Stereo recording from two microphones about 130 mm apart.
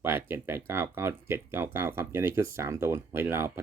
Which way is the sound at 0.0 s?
20° right (ahead or behind).